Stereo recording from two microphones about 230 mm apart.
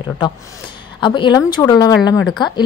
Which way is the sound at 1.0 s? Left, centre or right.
Centre.